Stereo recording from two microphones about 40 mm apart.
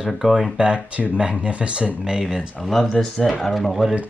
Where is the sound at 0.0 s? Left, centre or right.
Centre; by 2.0 s right.